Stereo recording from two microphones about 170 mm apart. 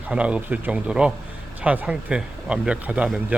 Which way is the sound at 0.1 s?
5° right (ahead or behind).